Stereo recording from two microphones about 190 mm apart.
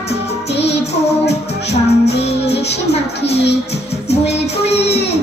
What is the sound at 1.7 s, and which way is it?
Music, 60° left (ahead or behind).